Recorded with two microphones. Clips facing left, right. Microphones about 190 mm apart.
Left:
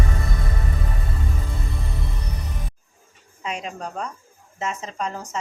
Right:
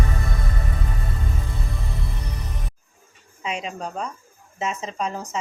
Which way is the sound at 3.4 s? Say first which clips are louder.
Right 1 dB; 5° right (ahead or behind).